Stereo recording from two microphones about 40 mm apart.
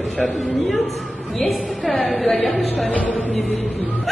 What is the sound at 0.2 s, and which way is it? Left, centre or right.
Speech, centre.